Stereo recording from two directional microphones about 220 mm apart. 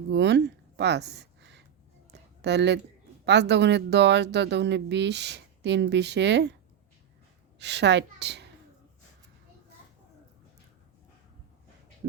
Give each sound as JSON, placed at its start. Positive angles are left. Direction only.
{"t": 0.1, "sound": "a sound", "side_deg": -50}
{"t": 2.4, "sound": "speech", "side_deg": -50}
{"t": 7.6, "sound": "speech", "side_deg": -50}